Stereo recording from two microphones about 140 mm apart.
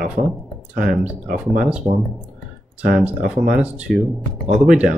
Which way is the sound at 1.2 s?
70° right (ahead or behind).